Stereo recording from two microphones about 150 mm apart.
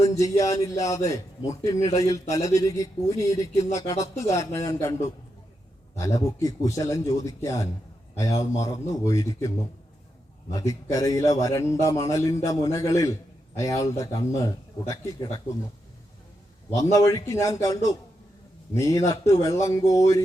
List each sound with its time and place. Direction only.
0.0 s a man's voice: 20° left (ahead or behind)
6.0 s a man's voice: 25° left (ahead or behind)
10.5 s a man's voice: 25° left (ahead or behind)
16.7 s a man's voice: 20° left (ahead or behind)